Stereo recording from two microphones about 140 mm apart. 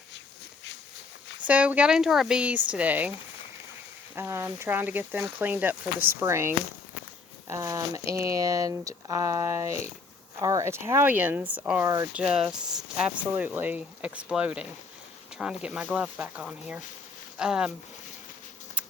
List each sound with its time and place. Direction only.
1.5 s speech: 10° right (ahead or behind)
4.1 s speech: 15° right (ahead or behind)
12.1 s speech: 5° right (ahead or behind)